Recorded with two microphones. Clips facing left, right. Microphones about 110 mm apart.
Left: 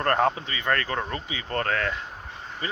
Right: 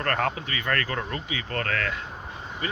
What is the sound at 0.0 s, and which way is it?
Speech, 20° left (ahead or behind).